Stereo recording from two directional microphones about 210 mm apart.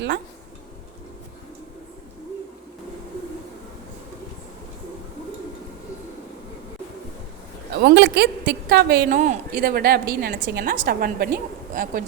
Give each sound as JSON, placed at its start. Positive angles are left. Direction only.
{"t": 7.7, "sound": "a woman's voice", "side_deg": -50}
{"t": 9.1, "sound": "a woman's voice", "side_deg": -35}